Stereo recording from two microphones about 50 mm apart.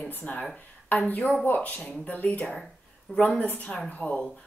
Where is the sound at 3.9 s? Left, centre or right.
Left.